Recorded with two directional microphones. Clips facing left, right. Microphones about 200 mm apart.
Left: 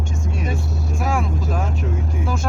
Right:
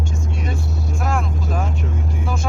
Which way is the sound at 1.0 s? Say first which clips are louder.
Left 1 dB; centre (ahead or behind).